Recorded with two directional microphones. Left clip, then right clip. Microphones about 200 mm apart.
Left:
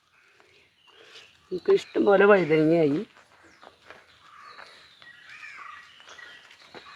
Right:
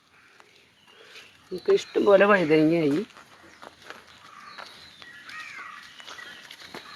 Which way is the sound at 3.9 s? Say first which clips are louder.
Right 4 dB; 60° right (ahead or behind).